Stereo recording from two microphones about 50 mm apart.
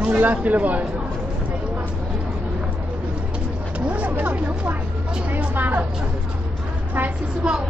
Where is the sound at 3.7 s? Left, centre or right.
Right.